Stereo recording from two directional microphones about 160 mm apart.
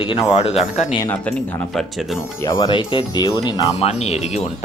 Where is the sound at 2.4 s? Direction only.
25° left (ahead or behind).